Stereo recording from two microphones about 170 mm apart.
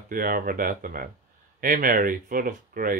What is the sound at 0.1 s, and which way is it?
Speech, 55° right (ahead or behind).